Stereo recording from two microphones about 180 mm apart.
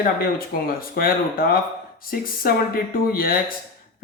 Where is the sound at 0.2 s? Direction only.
55° left (ahead or behind).